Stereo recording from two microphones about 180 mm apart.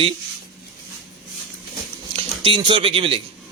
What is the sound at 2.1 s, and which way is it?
Speech, 30° right (ahead or behind).